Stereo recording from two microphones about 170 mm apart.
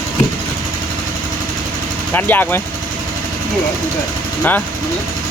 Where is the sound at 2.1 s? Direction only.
10° left (ahead or behind).